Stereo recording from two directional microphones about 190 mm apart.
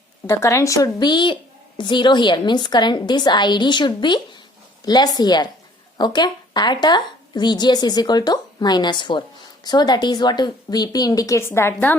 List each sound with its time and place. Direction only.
0.3 s a woman's voice: 15° left (ahead or behind)